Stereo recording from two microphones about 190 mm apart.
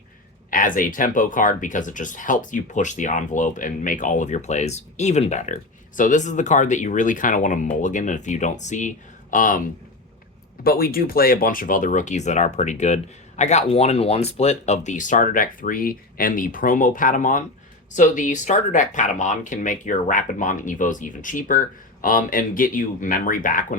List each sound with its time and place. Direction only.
0.5 s speech: 45° left (ahead or behind)
10.6 s speech: 50° left (ahead or behind)